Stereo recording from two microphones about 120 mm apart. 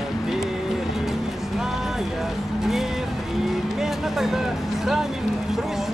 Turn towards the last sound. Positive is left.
turn(degrees=-5)  # may be behind; listen again after turning